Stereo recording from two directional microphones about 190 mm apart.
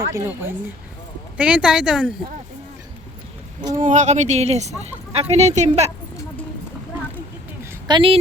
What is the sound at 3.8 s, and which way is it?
A woman's voice, 40° right (ahead or behind).